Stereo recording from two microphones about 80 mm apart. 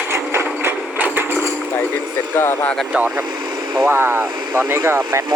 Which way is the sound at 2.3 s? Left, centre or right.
Left.